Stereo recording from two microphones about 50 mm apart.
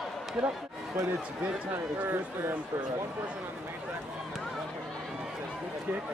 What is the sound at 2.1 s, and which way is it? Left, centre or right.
Speech, right.